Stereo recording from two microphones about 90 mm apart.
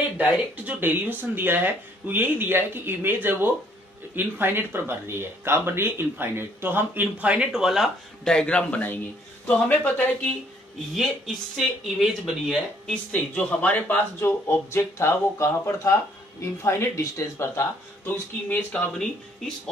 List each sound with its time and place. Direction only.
0.2 s speech: 20° right (ahead or behind); by 7.9 s 5° right (ahead or behind)
8.3 s speech: 10° left (ahead or behind)
11.5 s speech: 5° right (ahead or behind)
13.1 s speech: 15° left (ahead or behind)
14.7 s speech: 30° left (ahead or behind)
18.0 s speech: 20° left (ahead or behind)